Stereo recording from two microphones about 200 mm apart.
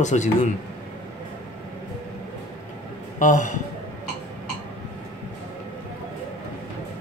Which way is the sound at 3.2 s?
40° left (ahead or behind).